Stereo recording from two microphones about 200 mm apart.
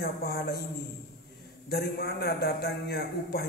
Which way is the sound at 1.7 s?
50° left (ahead or behind).